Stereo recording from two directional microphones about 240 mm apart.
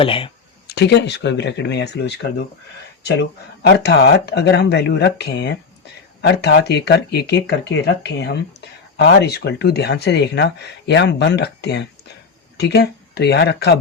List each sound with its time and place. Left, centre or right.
0.0 s speech: left
0.7 s speech: left